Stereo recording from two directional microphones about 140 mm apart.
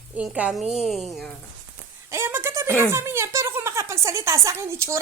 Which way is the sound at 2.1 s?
15° right (ahead or behind).